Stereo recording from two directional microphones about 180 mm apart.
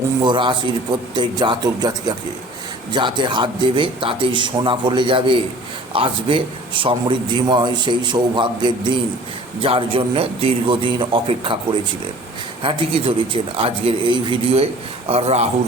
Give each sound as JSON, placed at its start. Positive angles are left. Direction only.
{"t": 0.2, "sound": "a man's voice", "side_deg": -25}